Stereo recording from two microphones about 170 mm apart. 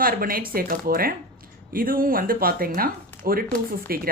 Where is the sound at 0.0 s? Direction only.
60° right (ahead or behind).